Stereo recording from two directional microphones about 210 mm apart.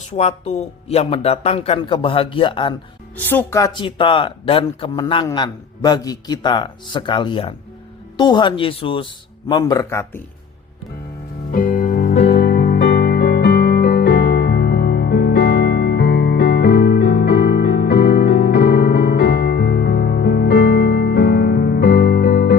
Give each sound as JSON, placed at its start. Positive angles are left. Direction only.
{"t": 0.1, "sound": "speech", "side_deg": 30}
{"t": 3.2, "sound": "speech", "side_deg": 10}
{"t": 11.5, "sound": "music", "side_deg": 40}